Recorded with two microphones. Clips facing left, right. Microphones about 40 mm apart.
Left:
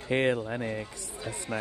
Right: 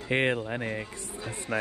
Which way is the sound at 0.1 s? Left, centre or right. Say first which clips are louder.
Even; right.